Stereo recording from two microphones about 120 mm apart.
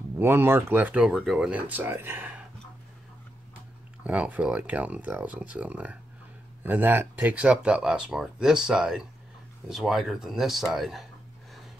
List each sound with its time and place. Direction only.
0.2 s speech: 20° right (ahead or behind)
4.0 s speech: 10° right (ahead or behind)